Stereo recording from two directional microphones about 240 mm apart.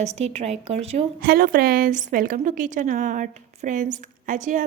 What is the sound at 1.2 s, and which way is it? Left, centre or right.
A woman's voice, right.